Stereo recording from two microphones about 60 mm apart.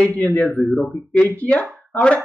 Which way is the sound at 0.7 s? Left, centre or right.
Centre.